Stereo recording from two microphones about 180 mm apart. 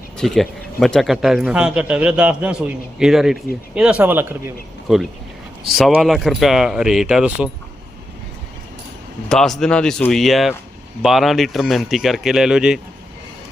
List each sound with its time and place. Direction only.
0.2 s a man's voice: centre (ahead or behind)
9.3 s a man's voice: 5° left (ahead or behind)